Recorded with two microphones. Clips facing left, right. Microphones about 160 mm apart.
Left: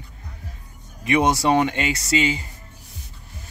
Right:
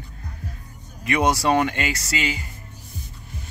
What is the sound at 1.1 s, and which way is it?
Speech, 20° left (ahead or behind).